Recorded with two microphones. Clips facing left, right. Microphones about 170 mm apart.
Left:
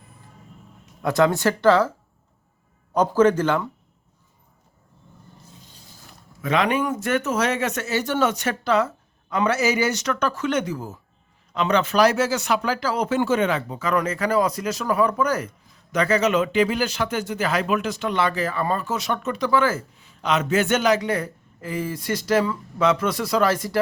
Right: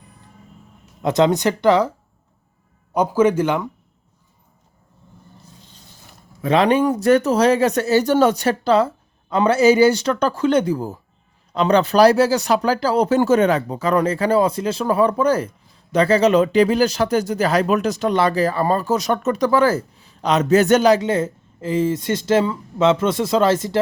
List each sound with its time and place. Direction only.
1.0 s speech: 20° right (ahead or behind)
2.9 s speech: 10° right (ahead or behind)
6.4 s speech: 30° right (ahead or behind)